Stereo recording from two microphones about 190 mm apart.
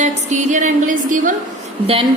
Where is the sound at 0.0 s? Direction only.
40° right (ahead or behind).